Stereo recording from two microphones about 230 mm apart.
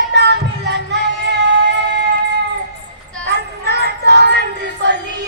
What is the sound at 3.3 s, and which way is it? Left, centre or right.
Music, right.